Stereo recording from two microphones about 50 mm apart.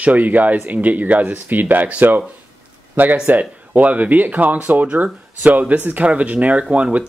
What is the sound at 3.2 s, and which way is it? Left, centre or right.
Speech, right.